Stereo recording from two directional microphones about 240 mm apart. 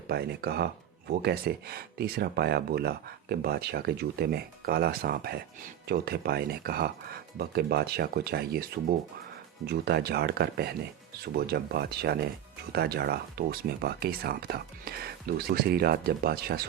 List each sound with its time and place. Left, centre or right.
0.1 s speech: right
9.6 s speech: right